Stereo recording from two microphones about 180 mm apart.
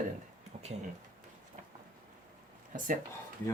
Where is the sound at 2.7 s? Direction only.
50° right (ahead or behind).